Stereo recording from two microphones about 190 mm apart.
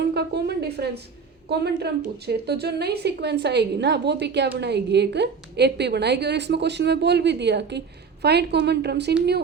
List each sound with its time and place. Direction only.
0.1 s a woman's voice: 60° right (ahead or behind)